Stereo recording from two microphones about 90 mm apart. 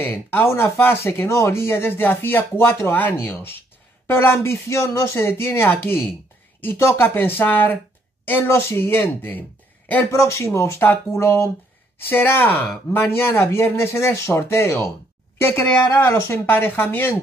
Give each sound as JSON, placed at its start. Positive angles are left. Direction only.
{"t": 0.0, "sound": "speech", "side_deg": 20}